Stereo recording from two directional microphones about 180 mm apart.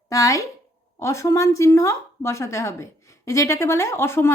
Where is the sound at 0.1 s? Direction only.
20° left (ahead or behind).